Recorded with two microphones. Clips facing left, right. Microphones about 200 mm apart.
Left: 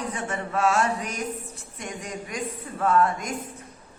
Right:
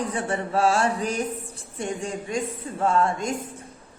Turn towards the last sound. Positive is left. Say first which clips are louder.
# even
turn(degrees=-25)  # may be behind; listen again after turning